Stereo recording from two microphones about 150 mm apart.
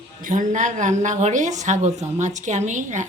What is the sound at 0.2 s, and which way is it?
A woman's voice, 60° right (ahead or behind).